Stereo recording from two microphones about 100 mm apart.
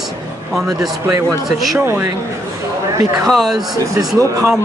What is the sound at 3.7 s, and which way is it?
Speech, 30° right (ahead or behind).